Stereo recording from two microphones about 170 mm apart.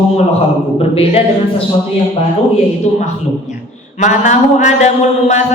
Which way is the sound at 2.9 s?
40° left (ahead or behind).